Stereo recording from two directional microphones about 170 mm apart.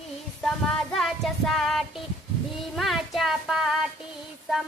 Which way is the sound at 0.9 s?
Centre (ahead or behind).